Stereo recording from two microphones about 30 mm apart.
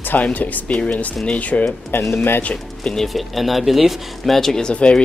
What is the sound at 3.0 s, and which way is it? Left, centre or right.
Speech, centre.